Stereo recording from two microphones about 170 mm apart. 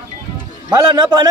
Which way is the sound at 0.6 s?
20° right (ahead or behind).